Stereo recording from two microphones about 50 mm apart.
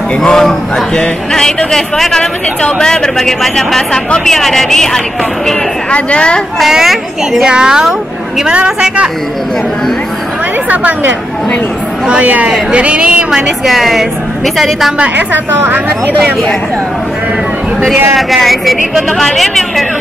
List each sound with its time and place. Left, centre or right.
0.2 s a woman's voice: centre
5.9 s a woman's voice: left
6.6 s a woman's voice: centre
10.7 s speech: right
13.7 s speech: centre
15.1 s speech: right
18.1 s speech: centre